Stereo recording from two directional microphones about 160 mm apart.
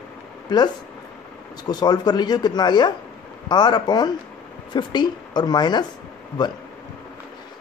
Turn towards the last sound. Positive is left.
turn(degrees=25)  # may be behind; listen again after turning